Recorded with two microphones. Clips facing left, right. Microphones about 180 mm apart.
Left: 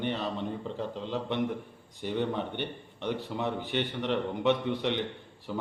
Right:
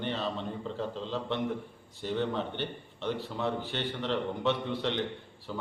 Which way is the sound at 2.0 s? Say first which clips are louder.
Left 1 dB; 15° left (ahead or behind).